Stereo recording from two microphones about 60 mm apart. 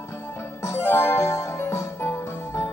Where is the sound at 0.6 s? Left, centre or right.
Left.